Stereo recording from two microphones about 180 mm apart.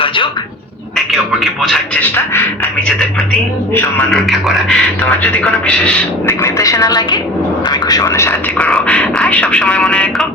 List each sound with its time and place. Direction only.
1.6 s a man's voice: centre (ahead or behind)
4.1 s a man's voice: centre (ahead or behind)
6.4 s a woman's voice: 20° left (ahead or behind); by 10.2 s 5° left (ahead or behind)